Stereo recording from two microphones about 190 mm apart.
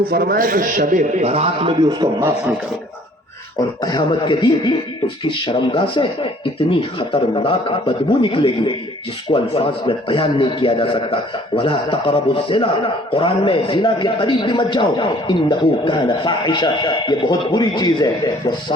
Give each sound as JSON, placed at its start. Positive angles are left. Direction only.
{"t": 0.1, "sound": "a man's voice", "side_deg": -50}
{"t": 3.6, "sound": "a man's voice", "side_deg": 20}